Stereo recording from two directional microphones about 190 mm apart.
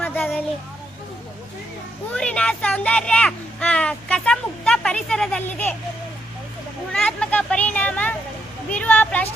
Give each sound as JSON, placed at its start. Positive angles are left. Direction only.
{"t": 0.0, "sound": "a sound", "side_deg": 10}
{"t": 2.1, "sound": "speech", "side_deg": 5}
{"t": 6.9, "sound": "speech", "side_deg": 5}